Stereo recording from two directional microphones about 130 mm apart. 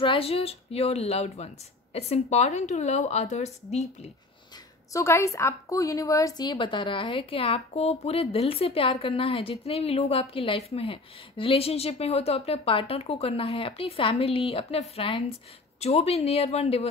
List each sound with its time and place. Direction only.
0.0 s a woman's voice: 45° left (ahead or behind)
4.9 s a woman's voice: 20° left (ahead or behind); by 16.8 s 50° left (ahead or behind)